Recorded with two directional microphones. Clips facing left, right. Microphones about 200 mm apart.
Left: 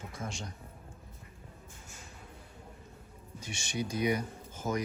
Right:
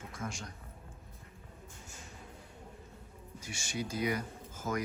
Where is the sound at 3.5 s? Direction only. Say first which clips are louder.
Left 3 dB; 20° left (ahead or behind).